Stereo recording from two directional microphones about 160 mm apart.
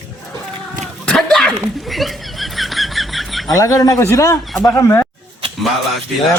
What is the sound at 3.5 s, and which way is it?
A man's voice, 20° left (ahead or behind).